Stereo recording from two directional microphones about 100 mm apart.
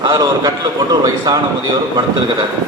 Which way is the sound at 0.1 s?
40° right (ahead or behind).